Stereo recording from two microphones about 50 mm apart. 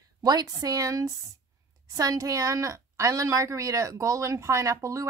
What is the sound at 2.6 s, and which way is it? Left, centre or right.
Speech, right.